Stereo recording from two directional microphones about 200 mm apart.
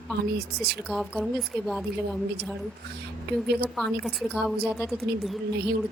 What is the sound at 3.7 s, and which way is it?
Speech, centre (ahead or behind).